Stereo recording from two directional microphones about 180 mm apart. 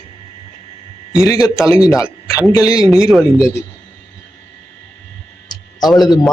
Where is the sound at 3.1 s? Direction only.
Centre (ahead or behind).